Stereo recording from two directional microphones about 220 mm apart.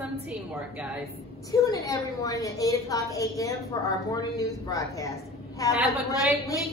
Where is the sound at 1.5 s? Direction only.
15° left (ahead or behind).